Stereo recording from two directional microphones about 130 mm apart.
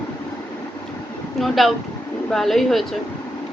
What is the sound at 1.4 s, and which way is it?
Speech, centre (ahead or behind).